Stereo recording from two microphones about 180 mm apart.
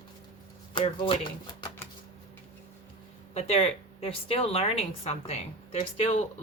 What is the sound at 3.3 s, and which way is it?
Speech, 30° left (ahead or behind).